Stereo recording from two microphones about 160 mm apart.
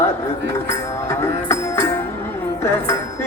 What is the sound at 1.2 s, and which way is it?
Music, 15° left (ahead or behind).